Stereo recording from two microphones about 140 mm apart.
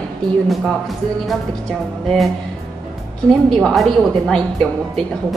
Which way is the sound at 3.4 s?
5° left (ahead or behind).